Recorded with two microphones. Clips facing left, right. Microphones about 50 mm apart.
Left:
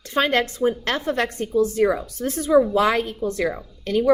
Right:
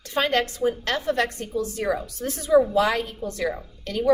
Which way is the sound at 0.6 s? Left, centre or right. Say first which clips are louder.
Left 2 dB; left.